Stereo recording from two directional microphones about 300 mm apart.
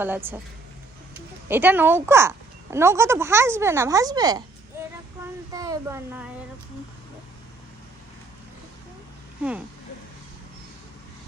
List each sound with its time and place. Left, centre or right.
0.0 s speech: centre